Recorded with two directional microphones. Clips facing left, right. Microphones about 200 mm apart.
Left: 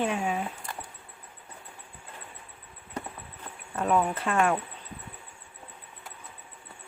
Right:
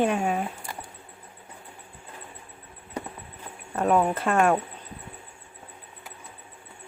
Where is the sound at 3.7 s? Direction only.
45° right (ahead or behind).